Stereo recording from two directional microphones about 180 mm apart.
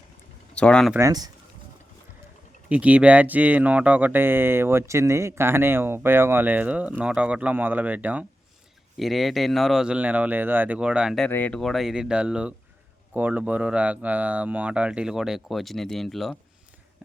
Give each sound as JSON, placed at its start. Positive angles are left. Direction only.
{"t": 0.5, "sound": "speech", "side_deg": 5}
{"t": 0.9, "sound": "speech", "side_deg": -20}
{"t": 2.6, "sound": "speech", "side_deg": -5}
{"t": 11.3, "sound": "speech", "side_deg": 10}